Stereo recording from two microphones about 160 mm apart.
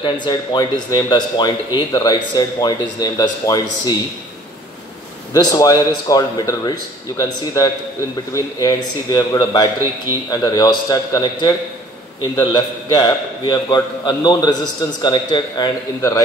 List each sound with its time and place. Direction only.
0.0 s speech: 30° left (ahead or behind)
5.3 s speech: 20° left (ahead or behind)